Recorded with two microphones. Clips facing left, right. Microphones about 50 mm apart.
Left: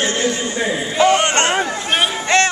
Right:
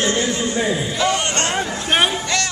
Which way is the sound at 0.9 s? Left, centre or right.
Left.